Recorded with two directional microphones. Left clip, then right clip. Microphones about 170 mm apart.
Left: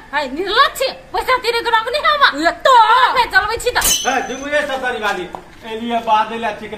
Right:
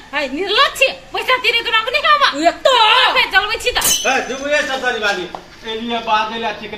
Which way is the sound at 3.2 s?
20° left (ahead or behind).